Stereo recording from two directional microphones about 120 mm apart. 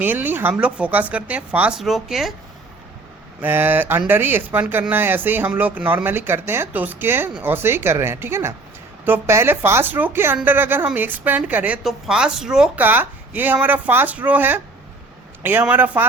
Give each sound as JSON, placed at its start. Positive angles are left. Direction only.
{"t": 0.0, "sound": "a woman's voice", "side_deg": -15}
{"t": 3.4, "sound": "a woman's voice", "side_deg": -15}